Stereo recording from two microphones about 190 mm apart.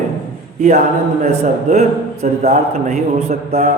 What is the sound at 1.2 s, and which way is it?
A man's voice, 35° right (ahead or behind).